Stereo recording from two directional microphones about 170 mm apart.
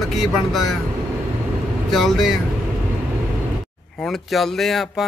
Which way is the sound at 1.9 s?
Centre (ahead or behind).